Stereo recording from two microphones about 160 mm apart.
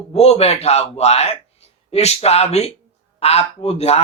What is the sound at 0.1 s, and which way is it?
Speech, 40° left (ahead or behind).